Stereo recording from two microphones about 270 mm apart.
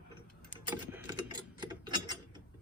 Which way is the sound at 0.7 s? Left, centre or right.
Centre.